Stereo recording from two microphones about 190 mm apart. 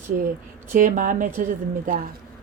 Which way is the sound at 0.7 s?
45° right (ahead or behind).